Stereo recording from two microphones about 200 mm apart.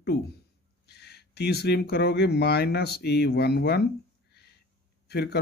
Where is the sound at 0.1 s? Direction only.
50° left (ahead or behind).